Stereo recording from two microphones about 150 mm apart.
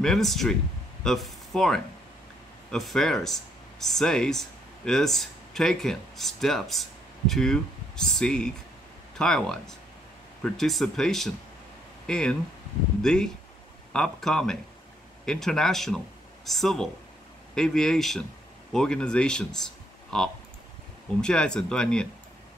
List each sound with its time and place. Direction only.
0.0 s speech: centre (ahead or behind)